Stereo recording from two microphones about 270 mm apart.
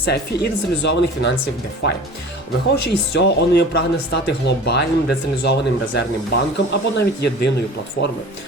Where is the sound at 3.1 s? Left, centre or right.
Left.